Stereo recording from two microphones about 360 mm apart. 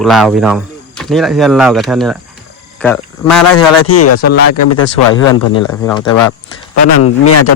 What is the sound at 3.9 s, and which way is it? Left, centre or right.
Speech, left.